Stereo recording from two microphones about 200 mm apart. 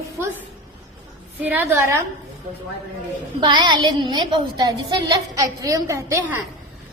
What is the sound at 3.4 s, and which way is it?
A woman's voice, 25° right (ahead or behind).